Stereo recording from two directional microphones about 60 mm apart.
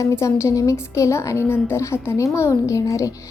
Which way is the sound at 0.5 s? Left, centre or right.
Left.